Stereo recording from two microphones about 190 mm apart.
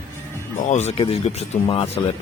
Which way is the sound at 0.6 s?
35° left (ahead or behind).